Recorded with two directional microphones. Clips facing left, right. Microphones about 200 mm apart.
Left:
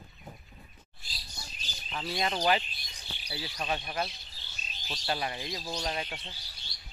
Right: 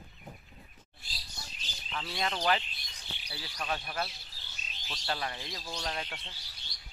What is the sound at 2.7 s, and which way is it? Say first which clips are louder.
Chirp: left 1 dB; 20° right (ahead or behind).